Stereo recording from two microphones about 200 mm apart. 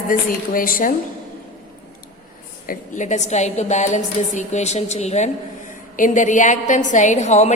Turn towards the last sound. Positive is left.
turn(degrees=35)  # may be behind; listen again after turning